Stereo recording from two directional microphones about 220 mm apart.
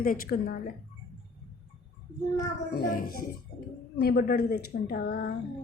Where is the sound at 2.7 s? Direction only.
45° left (ahead or behind).